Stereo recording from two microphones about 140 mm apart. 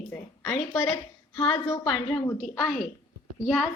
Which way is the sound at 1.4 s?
35° left (ahead or behind).